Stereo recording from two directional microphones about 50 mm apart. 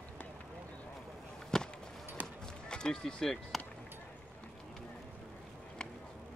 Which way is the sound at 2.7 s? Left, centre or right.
Centre.